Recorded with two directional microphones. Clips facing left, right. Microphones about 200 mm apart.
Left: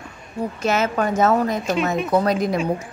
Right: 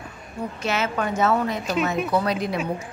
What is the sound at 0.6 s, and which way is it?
A woman's voice, 45° left (ahead or behind).